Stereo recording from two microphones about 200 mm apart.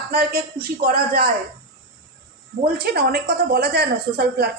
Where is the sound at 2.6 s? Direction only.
50° right (ahead or behind).